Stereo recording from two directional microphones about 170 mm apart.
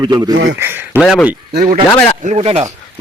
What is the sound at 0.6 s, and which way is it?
Speech, 15° right (ahead or behind).